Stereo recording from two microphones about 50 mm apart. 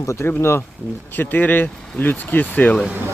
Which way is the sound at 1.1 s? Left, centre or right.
Left.